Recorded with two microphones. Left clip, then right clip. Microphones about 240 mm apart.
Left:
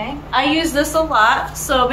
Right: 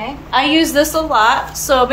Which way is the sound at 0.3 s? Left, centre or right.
Right.